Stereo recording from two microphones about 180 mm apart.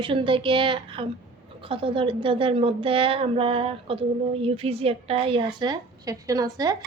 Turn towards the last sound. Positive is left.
turn(degrees=-20)  # may be behind; listen again after turning